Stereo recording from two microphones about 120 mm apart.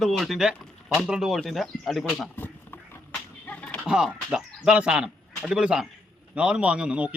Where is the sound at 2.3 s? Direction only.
15° left (ahead or behind).